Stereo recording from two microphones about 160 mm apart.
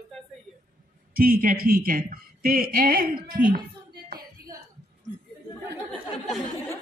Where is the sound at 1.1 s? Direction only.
60° right (ahead or behind).